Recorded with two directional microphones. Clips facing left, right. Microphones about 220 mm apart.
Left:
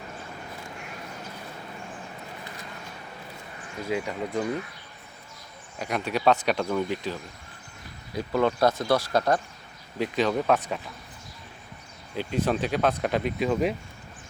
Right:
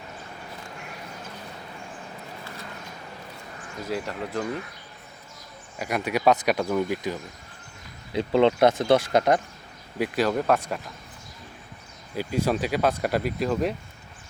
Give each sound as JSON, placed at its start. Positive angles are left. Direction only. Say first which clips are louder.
{"t": 3.8, "sound": "speech", "louder": "left 1 dB", "side_deg": 0}
{"t": 5.8, "sound": "speech", "louder": "right 2 dB", "side_deg": -10}
{"t": 8.1, "sound": "speech", "louder": "right 5 dB", "side_deg": -25}
{"t": 10.0, "sound": "speech", "louder": "right 1 dB", "side_deg": -5}
{"t": 12.1, "sound": "speech", "louder": "right 1 dB", "side_deg": -5}